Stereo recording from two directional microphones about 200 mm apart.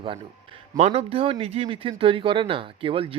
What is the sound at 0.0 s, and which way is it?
Speech, 25° right (ahead or behind).